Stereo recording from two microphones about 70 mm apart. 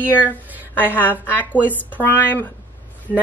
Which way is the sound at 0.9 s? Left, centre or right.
Left.